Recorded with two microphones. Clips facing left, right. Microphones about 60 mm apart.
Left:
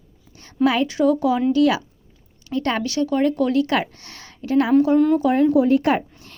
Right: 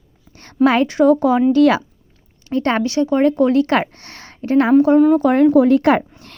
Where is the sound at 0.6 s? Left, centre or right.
Right.